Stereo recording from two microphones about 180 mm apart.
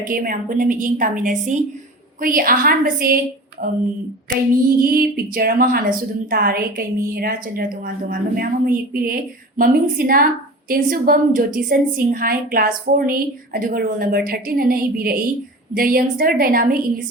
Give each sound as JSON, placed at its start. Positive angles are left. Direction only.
{"t": 0.0, "sound": "a woman's voice", "side_deg": -50}
{"t": 4.8, "sound": "a woman's voice", "side_deg": -55}